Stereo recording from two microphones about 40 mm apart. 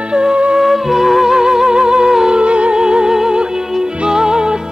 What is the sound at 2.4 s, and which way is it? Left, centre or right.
Music, right.